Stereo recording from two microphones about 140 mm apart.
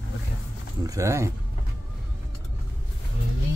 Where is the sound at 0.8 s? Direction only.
25° right (ahead or behind).